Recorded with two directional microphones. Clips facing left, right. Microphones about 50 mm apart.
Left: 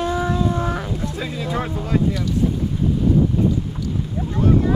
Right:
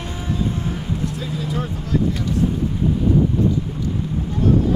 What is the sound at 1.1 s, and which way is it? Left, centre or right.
Vehicle, left.